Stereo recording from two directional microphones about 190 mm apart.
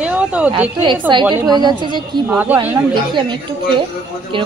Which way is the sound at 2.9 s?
25° right (ahead or behind).